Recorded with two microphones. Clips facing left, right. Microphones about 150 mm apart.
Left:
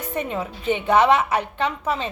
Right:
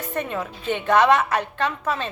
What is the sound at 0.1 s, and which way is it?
A woman's voice, 15° left (ahead or behind).